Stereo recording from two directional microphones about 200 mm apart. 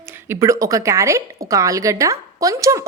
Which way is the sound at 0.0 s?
10° right (ahead or behind).